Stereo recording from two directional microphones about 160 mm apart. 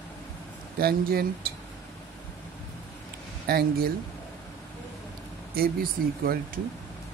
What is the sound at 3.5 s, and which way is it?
Speech, 75° right (ahead or behind).